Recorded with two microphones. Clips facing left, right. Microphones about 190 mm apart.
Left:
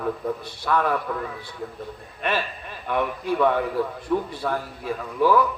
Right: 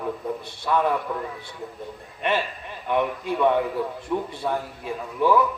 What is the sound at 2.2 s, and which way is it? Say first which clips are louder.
A man's voice: right 1 dB; 20° right (ahead or behind).